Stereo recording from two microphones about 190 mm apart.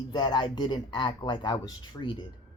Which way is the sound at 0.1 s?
20° left (ahead or behind).